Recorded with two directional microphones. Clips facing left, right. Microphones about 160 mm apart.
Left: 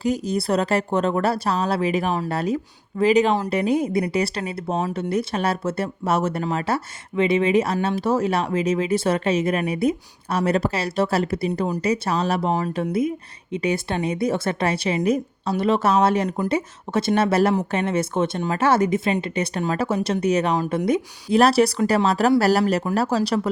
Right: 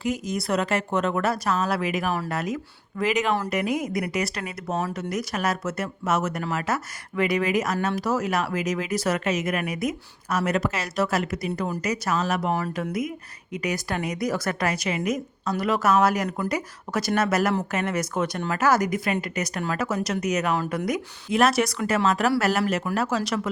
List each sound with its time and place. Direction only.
0.0 s speech: 35° left (ahead or behind)